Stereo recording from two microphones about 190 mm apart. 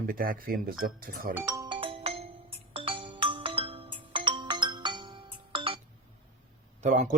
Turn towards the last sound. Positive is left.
turn(degrees=-40)  # may be behind; listen again after turning